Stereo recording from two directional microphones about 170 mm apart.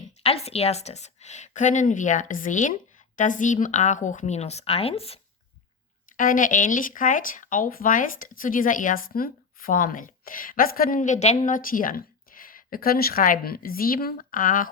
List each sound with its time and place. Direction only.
0.2 s speech: 35° left (ahead or behind)
6.1 s speech: 50° left (ahead or behind)